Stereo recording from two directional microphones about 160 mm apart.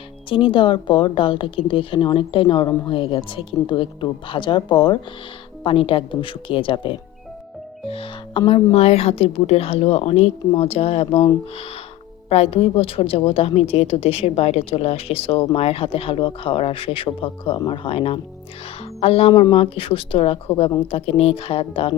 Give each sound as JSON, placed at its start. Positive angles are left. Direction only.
{"t": 0.3, "sound": "a woman's voice", "side_deg": 30}
{"t": 12.3, "sound": "a woman's voice", "side_deg": 40}